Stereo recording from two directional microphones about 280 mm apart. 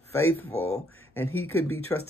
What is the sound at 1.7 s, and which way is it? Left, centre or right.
Speech, left.